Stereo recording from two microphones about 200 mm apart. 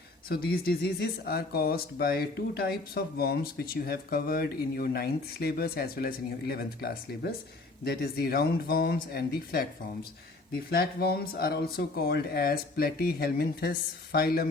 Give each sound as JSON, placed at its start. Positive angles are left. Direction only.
{"t": 0.3, "sound": "speech", "side_deg": 50}
{"t": 10.7, "sound": "speech", "side_deg": 50}